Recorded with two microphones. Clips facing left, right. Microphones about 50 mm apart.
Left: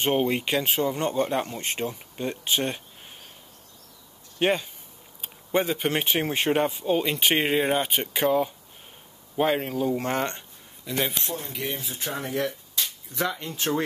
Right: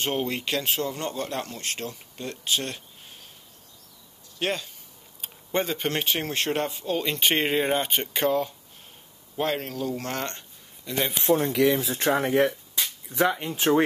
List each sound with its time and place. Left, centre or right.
0.0 s speech: centre
4.4 s speech: centre
5.2 s speech: centre
10.9 s speech: centre
11.2 s speech: right
11.5 s speech: right
12.7 s speech: right